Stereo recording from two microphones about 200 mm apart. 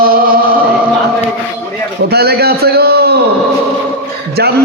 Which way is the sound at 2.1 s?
55° right (ahead or behind).